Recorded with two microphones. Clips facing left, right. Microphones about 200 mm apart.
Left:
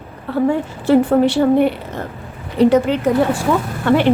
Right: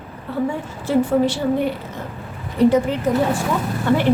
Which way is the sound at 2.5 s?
75° left (ahead or behind).